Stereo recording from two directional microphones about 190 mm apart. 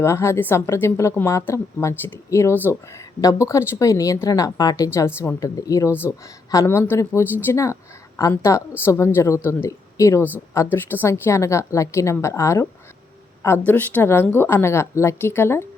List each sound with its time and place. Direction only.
0.0 s a woman's voice: 15° left (ahead or behind)